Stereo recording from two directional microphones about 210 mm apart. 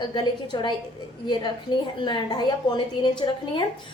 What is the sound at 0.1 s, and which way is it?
Speech, 20° left (ahead or behind).